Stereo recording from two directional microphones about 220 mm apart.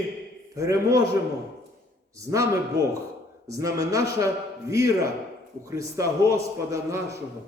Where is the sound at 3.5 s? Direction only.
15° right (ahead or behind).